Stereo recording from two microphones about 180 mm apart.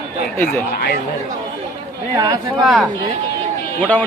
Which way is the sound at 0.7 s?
60° left (ahead or behind).